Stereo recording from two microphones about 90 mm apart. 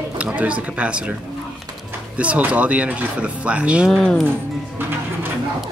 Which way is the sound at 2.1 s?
15° right (ahead or behind).